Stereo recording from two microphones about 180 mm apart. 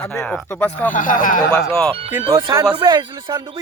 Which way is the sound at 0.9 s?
45° left (ahead or behind).